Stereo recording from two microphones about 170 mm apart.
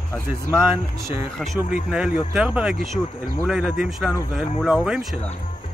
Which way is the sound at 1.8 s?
5° right (ahead or behind).